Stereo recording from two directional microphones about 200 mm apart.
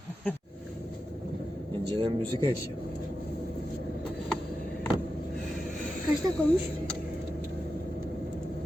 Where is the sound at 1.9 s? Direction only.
25° right (ahead or behind).